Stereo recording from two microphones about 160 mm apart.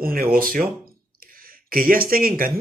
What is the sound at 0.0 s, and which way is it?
Speech, 65° right (ahead or behind).